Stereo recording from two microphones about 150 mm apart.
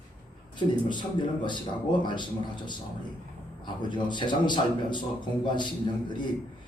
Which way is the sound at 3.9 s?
30° left (ahead or behind).